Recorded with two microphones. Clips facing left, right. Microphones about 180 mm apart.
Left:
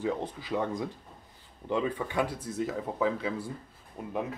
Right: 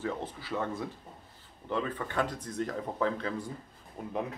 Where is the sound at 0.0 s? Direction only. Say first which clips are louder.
Left 4 dB; 15° left (ahead or behind).